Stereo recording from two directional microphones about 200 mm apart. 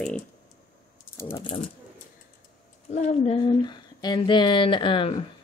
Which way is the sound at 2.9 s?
35° left (ahead or behind).